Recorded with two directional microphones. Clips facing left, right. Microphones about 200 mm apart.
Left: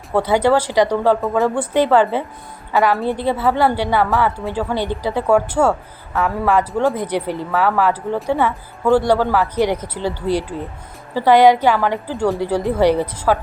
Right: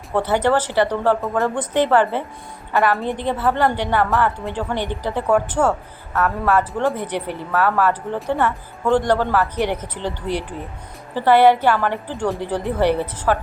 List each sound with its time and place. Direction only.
0.1 s a woman's voice: 10° left (ahead or behind)
1.2 s speech: centre (ahead or behind)
1.7 s a woman's voice: 10° left (ahead or behind)